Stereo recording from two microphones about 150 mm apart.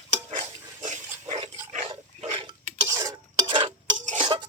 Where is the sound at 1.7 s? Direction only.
45° right (ahead or behind).